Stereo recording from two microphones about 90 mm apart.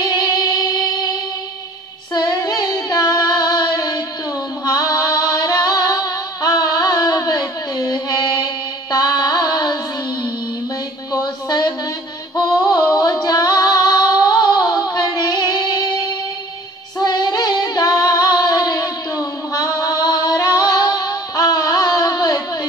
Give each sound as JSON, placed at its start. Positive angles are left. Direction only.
{"t": 0.0, "sound": "music", "side_deg": 45}
{"t": 2.1, "sound": "child singing", "side_deg": 50}
{"t": 4.6, "sound": "female singing", "side_deg": 45}
{"t": 8.9, "sound": "music", "side_deg": 45}
{"t": 11.1, "sound": "music", "side_deg": 50}
{"t": 12.6, "sound": "female singing", "side_deg": 45}
{"t": 17.0, "sound": "female singing", "side_deg": 50}